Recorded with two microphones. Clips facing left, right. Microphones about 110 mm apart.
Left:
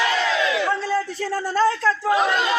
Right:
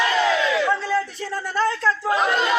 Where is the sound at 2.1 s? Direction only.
20° left (ahead or behind).